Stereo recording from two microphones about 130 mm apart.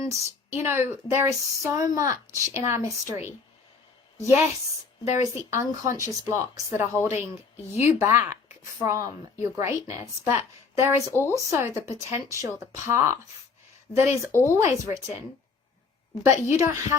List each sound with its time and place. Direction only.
0.0 s speech: 25° right (ahead or behind)
5.0 s speech: 60° left (ahead or behind)
5.3 s speech: 20° right (ahead or behind)
7.1 s speech: 55° left (ahead or behind)
7.9 s speech: 20° right (ahead or behind)
11.0 s speech: 20° left (ahead or behind)
11.3 s speech: 20° right (ahead or behind)
16.2 s speech: 20° right (ahead or behind)